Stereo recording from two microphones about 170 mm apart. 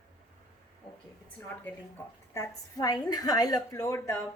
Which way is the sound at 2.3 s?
20° left (ahead or behind).